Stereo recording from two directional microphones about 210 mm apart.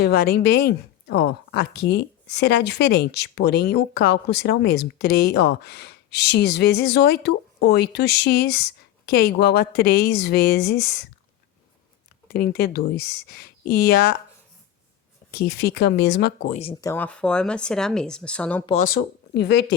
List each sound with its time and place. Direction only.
0.0 s speech: 45° left (ahead or behind)
12.3 s speech: 50° left (ahead or behind)
15.3 s speech: 50° left (ahead or behind)
16.5 s speech: 30° left (ahead or behind)
16.8 s speech: 10° left (ahead or behind)
18.6 s speech: 30° left (ahead or behind)
18.9 s speech: 50° left (ahead or behind)